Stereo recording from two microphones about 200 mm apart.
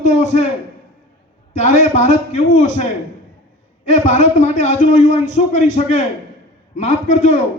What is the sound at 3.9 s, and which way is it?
A man's voice, 35° left (ahead or behind).